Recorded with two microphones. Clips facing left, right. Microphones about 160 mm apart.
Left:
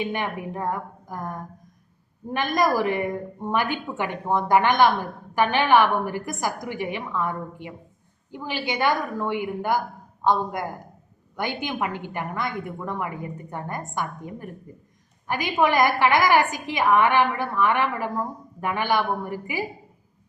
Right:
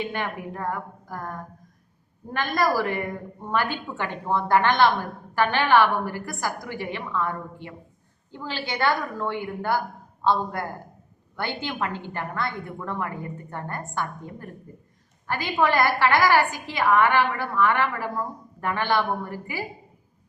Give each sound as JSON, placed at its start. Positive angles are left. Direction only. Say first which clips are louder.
{"t": 0.0, "sound": "a woman's voice", "louder": "left 2 dB", "side_deg": 15}